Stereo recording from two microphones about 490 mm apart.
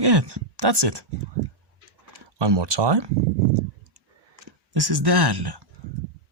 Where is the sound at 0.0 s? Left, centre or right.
Right.